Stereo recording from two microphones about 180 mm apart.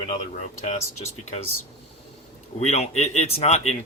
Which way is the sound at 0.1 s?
40° left (ahead or behind).